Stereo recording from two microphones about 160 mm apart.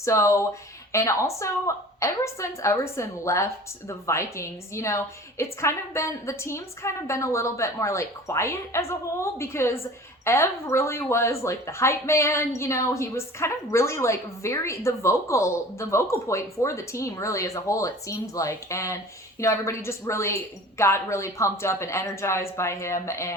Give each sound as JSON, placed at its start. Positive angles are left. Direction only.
{"t": 0.0, "sound": "speech", "side_deg": 20}